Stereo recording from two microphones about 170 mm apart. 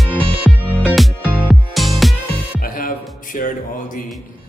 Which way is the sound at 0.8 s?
10° right (ahead or behind).